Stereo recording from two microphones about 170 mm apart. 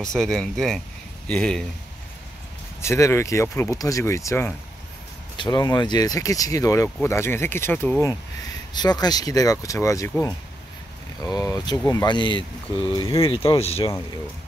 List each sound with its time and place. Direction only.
0.0 s speech: 5° left (ahead or behind)
2.8 s speech: 15° left (ahead or behind)
11.3 s speech: 20° left (ahead or behind); by 13.9 s 35° left (ahead or behind)